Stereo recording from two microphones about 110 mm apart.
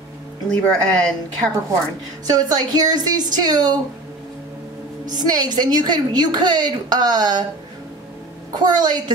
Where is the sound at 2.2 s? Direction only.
35° right (ahead or behind).